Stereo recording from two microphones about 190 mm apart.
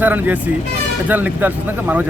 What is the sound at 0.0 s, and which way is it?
Speech, 10° right (ahead or behind).